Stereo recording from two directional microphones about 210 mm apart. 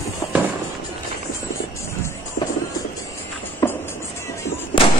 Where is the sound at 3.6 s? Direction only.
15° left (ahead or behind).